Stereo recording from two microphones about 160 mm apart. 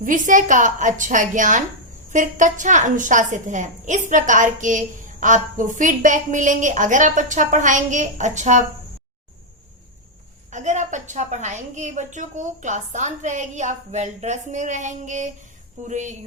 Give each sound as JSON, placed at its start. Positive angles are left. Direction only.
{"t": 0.0, "sound": "a woman's voice", "side_deg": -55}
{"t": 10.5, "sound": "a woman's voice", "side_deg": -50}